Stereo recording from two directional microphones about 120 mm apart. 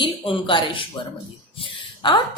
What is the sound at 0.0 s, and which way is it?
A woman's voice, 45° left (ahead or behind).